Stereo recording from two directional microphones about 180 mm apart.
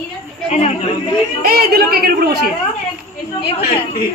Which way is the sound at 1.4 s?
55° right (ahead or behind).